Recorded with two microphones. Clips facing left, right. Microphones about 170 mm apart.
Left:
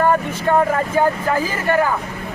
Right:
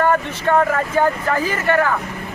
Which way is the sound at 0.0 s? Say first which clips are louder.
Left 1 dB; 10° left (ahead or behind).